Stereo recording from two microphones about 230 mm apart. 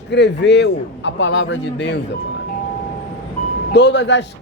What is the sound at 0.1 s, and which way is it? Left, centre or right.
A man's voice, left.